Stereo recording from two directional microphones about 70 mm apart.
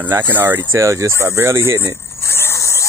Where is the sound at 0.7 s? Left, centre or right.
Right.